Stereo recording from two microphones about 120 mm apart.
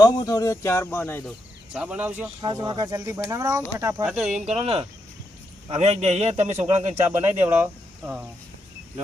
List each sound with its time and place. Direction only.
0.0 s speech: 30° left (ahead or behind)
1.7 s speech: 10° right (ahead or behind)
2.4 s speech: 35° right (ahead or behind)
4.0 s speech: 5° right (ahead or behind)
4.4 s a man's voice: 60° right (ahead or behind)
7.0 s speech: 15° right (ahead or behind)